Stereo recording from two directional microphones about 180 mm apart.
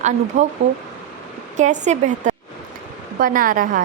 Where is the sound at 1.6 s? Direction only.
40° right (ahead or behind).